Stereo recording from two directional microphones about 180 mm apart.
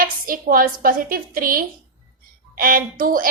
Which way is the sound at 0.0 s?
50° right (ahead or behind).